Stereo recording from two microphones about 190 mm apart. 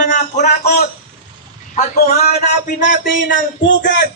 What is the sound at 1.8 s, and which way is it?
A man's voice, 35° left (ahead or behind).